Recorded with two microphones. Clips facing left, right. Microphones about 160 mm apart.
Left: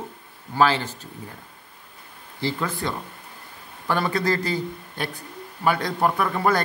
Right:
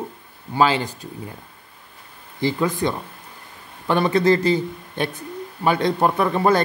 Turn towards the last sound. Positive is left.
turn(degrees=-20)  # may be behind; listen again after turning